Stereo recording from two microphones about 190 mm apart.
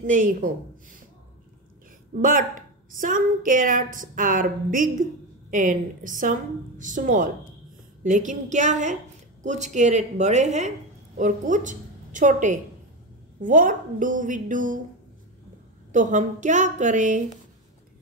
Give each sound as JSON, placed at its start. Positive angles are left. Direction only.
{"t": 0.0, "sound": "a woman's voice", "side_deg": -45}
{"t": 2.2, "sound": "a woman's voice", "side_deg": -45}
{"t": 15.9, "sound": "speech", "side_deg": -40}